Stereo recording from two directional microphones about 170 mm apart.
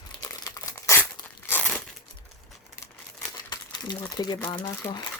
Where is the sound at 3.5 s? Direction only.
20° left (ahead or behind).